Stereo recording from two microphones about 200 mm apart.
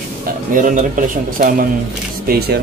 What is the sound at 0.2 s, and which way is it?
A man's voice, 45° right (ahead or behind).